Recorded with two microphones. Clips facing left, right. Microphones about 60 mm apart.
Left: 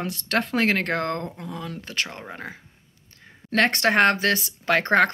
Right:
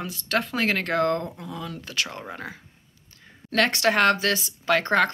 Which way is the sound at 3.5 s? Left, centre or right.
Left.